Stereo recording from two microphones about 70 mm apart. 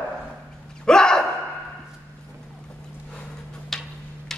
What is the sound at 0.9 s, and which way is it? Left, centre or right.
Gasp, centre.